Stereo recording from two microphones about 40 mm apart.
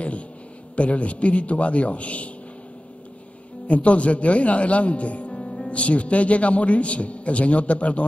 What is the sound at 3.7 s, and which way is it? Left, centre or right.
A man's voice, left.